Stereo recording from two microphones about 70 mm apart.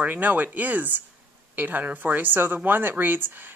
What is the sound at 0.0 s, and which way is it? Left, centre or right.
A woman's voice, right.